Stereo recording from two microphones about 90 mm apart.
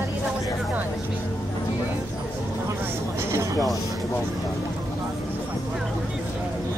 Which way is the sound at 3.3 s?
30° right (ahead or behind).